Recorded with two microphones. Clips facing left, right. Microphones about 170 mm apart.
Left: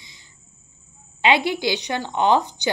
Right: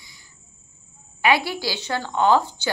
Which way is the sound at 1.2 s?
20° left (ahead or behind).